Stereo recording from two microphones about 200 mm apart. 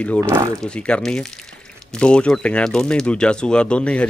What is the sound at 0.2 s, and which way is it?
Speech, 15° right (ahead or behind).